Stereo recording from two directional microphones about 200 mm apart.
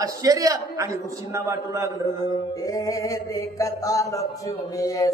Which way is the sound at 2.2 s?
15° left (ahead or behind).